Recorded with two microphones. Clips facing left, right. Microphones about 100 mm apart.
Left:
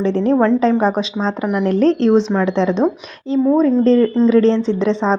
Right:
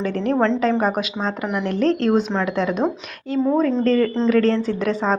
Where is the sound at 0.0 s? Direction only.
30° left (ahead or behind).